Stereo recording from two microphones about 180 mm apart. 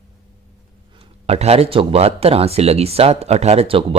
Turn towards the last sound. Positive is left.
turn(degrees=-30)  # may be behind; listen again after turning